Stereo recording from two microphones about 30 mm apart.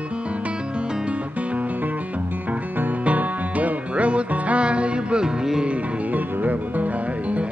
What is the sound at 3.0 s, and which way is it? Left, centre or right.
Music, right.